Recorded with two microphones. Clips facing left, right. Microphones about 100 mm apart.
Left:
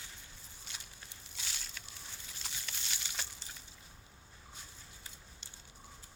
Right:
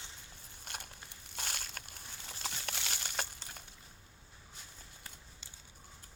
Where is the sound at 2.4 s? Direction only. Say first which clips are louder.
Right 6 dB; 75° right (ahead or behind); by 3.6 s 55° right (ahead or behind).